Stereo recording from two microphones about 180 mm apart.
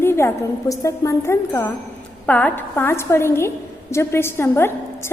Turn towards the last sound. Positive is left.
turn(degrees=15)  # may be behind; listen again after turning